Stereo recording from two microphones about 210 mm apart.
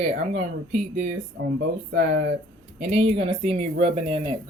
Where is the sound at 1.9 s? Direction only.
50° right (ahead or behind).